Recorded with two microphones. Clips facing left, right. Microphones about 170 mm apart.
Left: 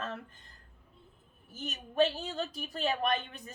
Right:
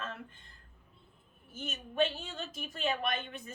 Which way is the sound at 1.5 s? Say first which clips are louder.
Left 3 dB; 40° left (ahead or behind).